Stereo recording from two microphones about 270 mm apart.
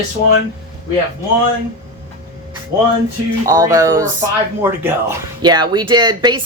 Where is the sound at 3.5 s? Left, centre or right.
Centre.